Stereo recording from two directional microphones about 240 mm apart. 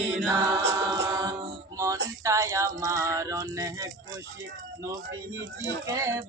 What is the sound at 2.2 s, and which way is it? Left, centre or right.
Male singing, centre.